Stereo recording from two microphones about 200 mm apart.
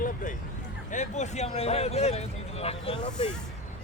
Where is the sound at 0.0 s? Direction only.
40° left (ahead or behind).